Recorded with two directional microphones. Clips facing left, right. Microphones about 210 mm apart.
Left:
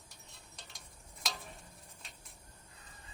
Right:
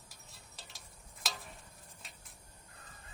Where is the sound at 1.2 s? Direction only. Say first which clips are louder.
Left 1 dB; centre (ahead or behind).